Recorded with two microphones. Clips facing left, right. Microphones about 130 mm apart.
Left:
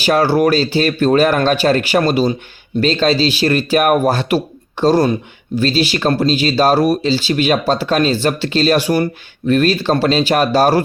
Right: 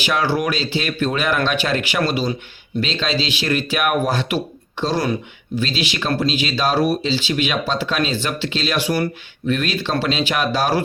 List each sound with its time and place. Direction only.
0.0 s speech: 40° left (ahead or behind)